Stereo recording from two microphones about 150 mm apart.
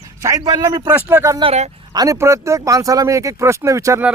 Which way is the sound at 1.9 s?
25° right (ahead or behind).